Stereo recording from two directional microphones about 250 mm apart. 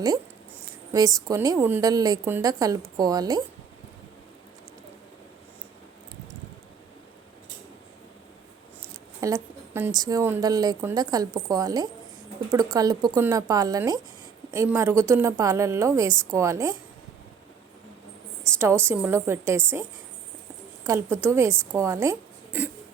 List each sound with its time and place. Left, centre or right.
0.9 s a woman's voice: centre
9.2 s a woman's voice: centre
18.9 s a woman's voice: centre
20.8 s a woman's voice: centre